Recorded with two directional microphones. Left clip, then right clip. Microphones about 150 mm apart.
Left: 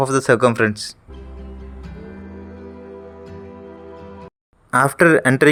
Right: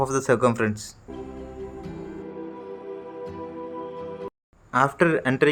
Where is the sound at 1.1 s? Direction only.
Centre (ahead or behind).